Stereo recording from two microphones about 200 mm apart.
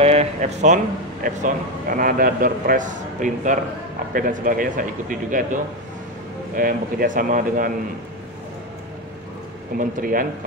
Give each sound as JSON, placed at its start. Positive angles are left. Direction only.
{"t": 0.0, "sound": "a man's voice", "side_deg": -30}
{"t": 9.8, "sound": "a man's voice", "side_deg": -40}